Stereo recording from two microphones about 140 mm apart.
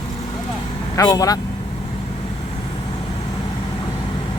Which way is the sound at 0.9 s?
25° left (ahead or behind).